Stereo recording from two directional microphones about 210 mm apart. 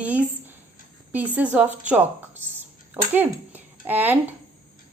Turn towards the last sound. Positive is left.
turn(degrees=-10)  # may be behind; listen again after turning